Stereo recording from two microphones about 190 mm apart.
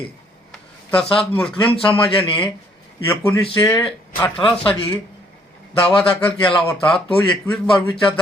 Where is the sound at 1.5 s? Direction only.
25° left (ahead or behind).